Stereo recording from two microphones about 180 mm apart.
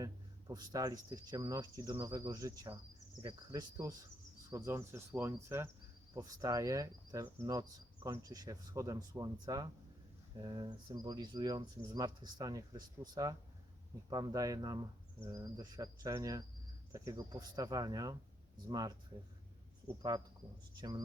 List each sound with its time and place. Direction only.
0.0 s cricket: 20° right (ahead or behind)